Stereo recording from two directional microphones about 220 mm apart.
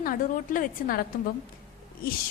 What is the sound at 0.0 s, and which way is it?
Speech, 40° left (ahead or behind).